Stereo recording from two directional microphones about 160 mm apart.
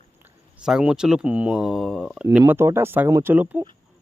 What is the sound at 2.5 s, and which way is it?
A man's voice, 15° right (ahead or behind).